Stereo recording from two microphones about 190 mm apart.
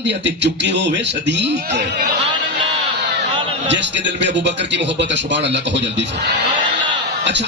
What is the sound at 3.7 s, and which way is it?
Speech, 70° right (ahead or behind).